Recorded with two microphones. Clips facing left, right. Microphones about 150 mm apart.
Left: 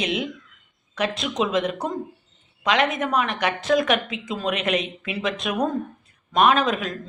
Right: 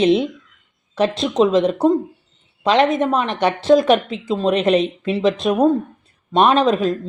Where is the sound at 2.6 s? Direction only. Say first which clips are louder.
Right 7 dB; 30° right (ahead or behind).